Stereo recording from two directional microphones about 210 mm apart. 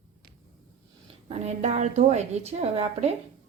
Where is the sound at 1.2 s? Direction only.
30° right (ahead or behind).